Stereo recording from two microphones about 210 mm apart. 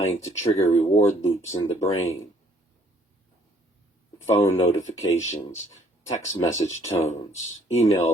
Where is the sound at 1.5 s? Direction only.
15° left (ahead or behind).